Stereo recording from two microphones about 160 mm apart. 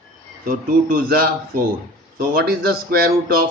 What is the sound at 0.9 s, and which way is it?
Speech, 70° right (ahead or behind).